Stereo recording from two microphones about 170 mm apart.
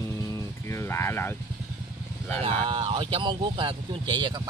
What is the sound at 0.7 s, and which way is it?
Speech, 15° left (ahead or behind).